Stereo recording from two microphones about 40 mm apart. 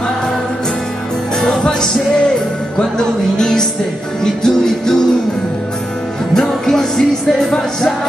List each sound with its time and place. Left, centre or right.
1.6 s music: centre
3.0 s music: centre
6.3 s music: centre